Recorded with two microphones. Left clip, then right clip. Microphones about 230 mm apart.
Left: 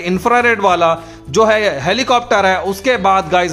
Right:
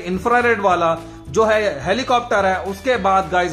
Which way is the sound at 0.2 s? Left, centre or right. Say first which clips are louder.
Left 3 dB; left.